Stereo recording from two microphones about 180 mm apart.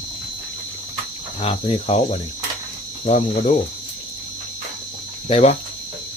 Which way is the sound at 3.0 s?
40° left (ahead or behind).